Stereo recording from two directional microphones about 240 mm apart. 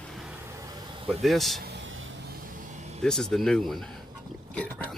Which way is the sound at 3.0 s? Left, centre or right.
Centre.